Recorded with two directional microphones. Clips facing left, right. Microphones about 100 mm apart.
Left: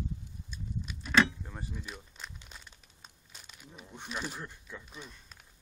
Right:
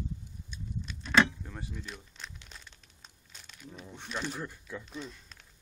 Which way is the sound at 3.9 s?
10° left (ahead or behind).